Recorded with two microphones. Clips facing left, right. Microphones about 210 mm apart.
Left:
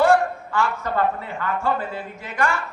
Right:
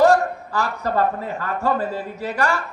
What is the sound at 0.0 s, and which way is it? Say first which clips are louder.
A man's voice: right 2 dB; 40° right (ahead or behind).